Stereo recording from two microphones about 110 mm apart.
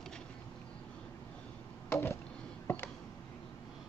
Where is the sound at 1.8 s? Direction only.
25° left (ahead or behind).